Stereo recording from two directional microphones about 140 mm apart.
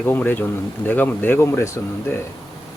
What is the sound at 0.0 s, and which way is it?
Speech, 15° left (ahead or behind).